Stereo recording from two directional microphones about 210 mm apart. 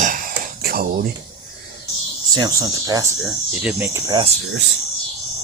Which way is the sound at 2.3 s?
20° right (ahead or behind).